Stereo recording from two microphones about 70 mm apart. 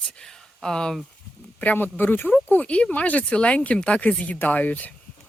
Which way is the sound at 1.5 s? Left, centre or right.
Left.